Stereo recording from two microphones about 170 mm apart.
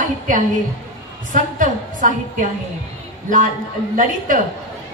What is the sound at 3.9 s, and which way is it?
Speech, 50° right (ahead or behind).